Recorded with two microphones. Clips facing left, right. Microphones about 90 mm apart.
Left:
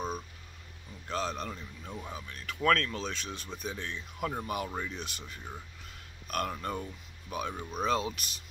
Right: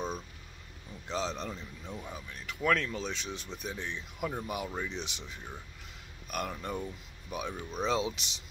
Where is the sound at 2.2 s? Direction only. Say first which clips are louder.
Left 1 dB; 10° right (ahead or behind).